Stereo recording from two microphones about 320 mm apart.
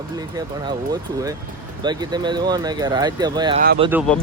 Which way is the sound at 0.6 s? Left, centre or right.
Centre.